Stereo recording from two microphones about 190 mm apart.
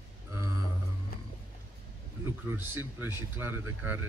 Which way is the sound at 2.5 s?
10° right (ahead or behind).